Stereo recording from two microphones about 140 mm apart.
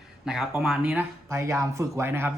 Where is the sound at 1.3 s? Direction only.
20° right (ahead or behind).